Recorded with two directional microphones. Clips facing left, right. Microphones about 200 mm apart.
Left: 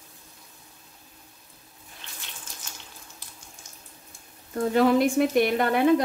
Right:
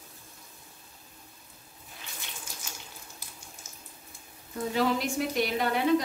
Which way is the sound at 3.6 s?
5° right (ahead or behind).